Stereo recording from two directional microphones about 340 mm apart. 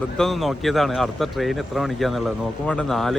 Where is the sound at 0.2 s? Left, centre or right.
Centre.